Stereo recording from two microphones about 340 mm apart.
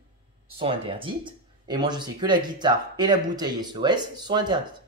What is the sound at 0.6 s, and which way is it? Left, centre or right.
Speech, centre.